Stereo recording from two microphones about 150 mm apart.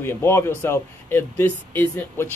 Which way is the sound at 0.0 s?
15° left (ahead or behind).